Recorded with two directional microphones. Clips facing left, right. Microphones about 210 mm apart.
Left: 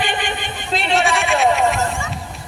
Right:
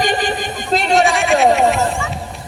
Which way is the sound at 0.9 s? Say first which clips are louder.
Right 4 dB; centre (ahead or behind).